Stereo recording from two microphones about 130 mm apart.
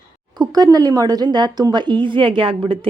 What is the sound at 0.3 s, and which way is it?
A woman's voice, 30° right (ahead or behind).